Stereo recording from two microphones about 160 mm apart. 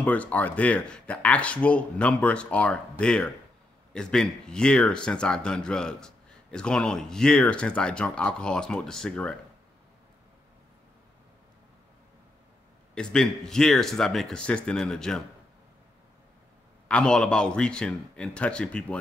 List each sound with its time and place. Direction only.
0.0 s speech: 10° left (ahead or behind)
12.9 s speech: 5° left (ahead or behind)
16.8 s speech: 5° left (ahead or behind)